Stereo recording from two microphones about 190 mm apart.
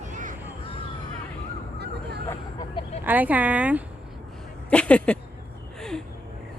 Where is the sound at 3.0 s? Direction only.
10° right (ahead or behind).